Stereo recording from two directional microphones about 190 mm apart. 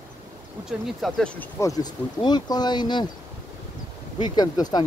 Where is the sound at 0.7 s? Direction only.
Centre (ahead or behind); by 3.1 s 25° left (ahead or behind).